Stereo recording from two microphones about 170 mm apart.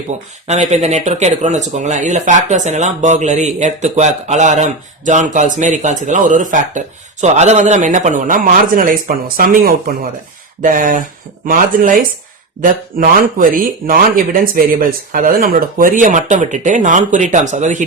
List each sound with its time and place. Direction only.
0.4 s speech: 40° right (ahead or behind)